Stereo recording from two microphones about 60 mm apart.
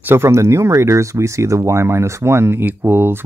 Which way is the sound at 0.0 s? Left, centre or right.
Right.